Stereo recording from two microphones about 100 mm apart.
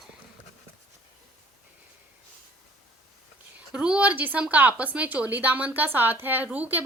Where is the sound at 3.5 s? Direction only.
10° right (ahead or behind).